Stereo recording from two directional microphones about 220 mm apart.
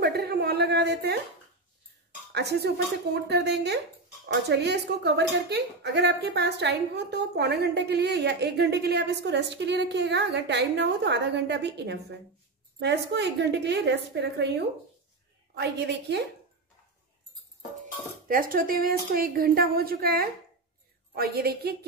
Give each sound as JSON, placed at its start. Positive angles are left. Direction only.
{"t": 0.0, "sound": "a sound", "side_deg": -45}
{"t": 2.3, "sound": "a woman's voice", "side_deg": -50}
{"t": 15.5, "sound": "a woman's voice", "side_deg": -50}
{"t": 18.3, "sound": "a woman's voice", "side_deg": -40}